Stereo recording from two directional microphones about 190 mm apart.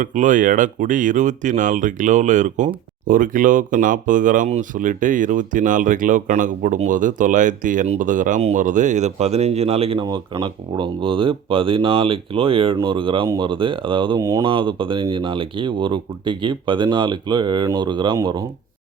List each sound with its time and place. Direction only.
0.0 s speech: 40° right (ahead or behind); by 18.4 s 20° right (ahead or behind)